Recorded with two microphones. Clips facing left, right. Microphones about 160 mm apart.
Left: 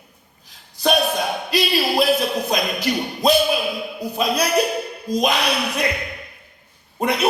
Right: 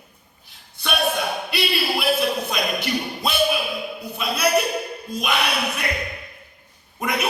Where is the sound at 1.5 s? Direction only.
40° left (ahead or behind).